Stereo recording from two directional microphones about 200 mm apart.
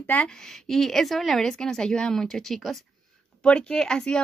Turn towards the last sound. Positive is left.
turn(degrees=5)  # may be behind; listen again after turning